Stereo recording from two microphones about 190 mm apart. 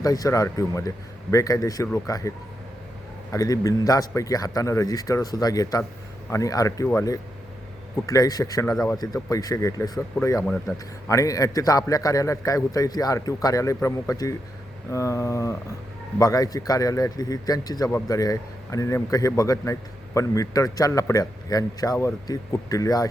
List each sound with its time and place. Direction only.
0.0 s a man's voice: 20° left (ahead or behind)
3.3 s a man's voice: 20° left (ahead or behind)
10.4 s a man's voice: 5° left (ahead or behind)
11.1 s a man's voice: 15° left (ahead or behind)